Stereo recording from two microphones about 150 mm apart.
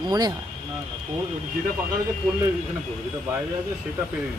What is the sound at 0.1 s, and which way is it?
Speech, 25° right (ahead or behind).